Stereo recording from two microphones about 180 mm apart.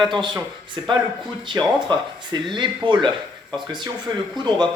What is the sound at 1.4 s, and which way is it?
Speech, 25° right (ahead or behind).